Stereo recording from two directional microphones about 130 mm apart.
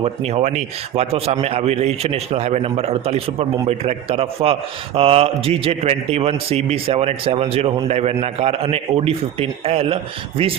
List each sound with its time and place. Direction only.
0.0 s a man's voice: 50° right (ahead or behind)